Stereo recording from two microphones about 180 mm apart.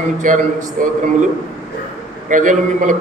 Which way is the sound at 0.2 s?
45° right (ahead or behind).